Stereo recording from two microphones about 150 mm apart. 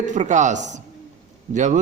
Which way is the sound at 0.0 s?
55° right (ahead or behind).